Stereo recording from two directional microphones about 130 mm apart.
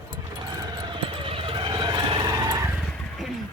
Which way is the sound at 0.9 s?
40° right (ahead or behind).